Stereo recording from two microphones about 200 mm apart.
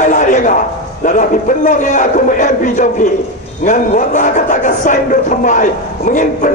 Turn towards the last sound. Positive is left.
turn(degrees=40)  # may be behind; listen again after turning